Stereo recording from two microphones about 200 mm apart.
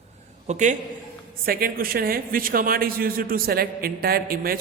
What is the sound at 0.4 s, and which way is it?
Speech, 35° right (ahead or behind).